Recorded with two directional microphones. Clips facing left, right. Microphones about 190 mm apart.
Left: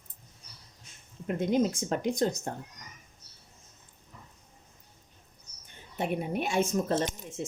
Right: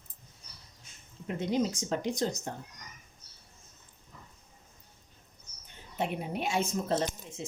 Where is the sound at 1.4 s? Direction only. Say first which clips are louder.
Left 3 dB; 50° left (ahead or behind).